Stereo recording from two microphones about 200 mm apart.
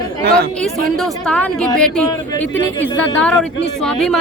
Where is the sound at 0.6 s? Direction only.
5° left (ahead or behind).